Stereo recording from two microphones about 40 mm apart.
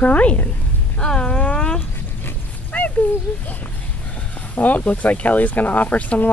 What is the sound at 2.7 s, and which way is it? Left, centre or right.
Speech, left.